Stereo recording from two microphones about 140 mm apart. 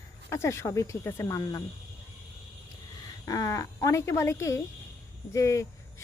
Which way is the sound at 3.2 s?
25° left (ahead or behind).